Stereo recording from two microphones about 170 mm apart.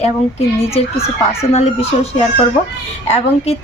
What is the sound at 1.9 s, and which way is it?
Speech, 45° left (ahead or behind).